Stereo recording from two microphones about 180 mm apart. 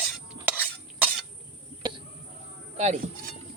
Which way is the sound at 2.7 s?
35° right (ahead or behind).